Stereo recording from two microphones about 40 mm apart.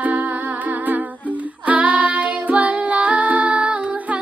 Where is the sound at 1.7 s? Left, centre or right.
Right.